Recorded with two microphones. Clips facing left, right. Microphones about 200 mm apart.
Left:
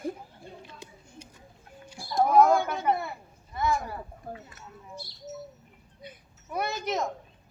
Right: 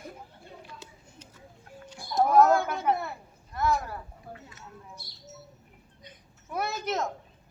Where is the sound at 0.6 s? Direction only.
15° left (ahead or behind).